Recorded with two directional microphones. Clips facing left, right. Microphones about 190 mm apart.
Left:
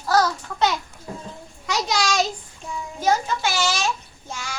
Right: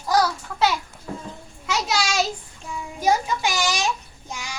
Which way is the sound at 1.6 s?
5° right (ahead or behind).